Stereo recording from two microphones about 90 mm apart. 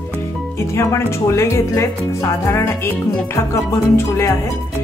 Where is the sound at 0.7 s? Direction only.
30° left (ahead or behind).